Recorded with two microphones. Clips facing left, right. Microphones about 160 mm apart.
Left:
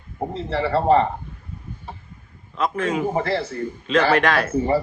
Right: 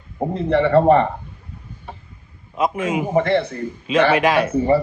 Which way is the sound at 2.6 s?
10° right (ahead or behind).